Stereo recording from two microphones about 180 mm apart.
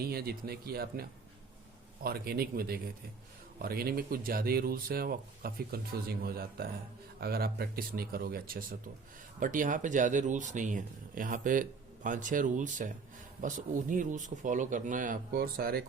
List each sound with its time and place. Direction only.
0.0 s speech: 60° right (ahead or behind)
2.0 s speech: 60° right (ahead or behind)